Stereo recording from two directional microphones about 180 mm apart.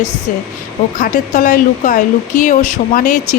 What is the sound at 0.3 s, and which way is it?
Speech, 50° left (ahead or behind).